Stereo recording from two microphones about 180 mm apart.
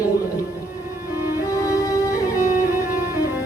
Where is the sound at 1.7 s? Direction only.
20° left (ahead or behind).